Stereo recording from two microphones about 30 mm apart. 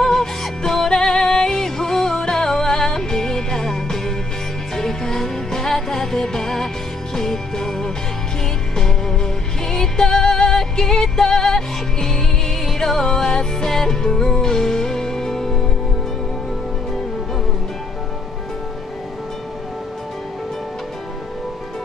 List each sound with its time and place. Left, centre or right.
0.0 s music: centre